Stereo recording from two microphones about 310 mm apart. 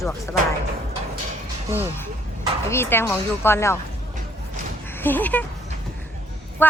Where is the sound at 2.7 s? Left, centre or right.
Centre.